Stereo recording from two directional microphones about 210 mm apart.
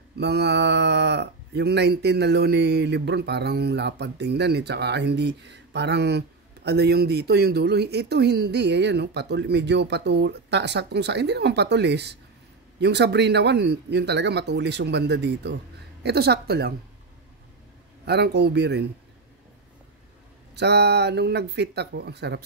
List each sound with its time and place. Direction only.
0.2 s speech: 55° right (ahead or behind)
18.0 s speech: 50° right (ahead or behind)
20.5 s speech: 50° right (ahead or behind)